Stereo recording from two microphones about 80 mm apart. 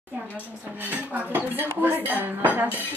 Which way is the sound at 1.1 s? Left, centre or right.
Right.